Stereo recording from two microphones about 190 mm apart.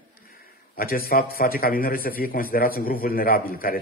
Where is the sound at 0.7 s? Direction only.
50° left (ahead or behind).